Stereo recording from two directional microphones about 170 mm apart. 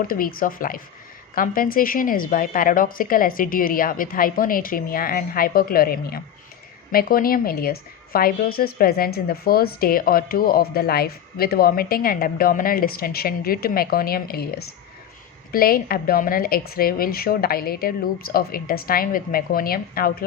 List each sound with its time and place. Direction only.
0.1 s a woman's voice: 55° left (ahead or behind)